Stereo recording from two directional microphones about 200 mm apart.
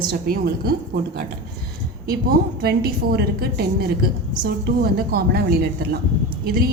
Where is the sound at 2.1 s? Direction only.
50° right (ahead or behind).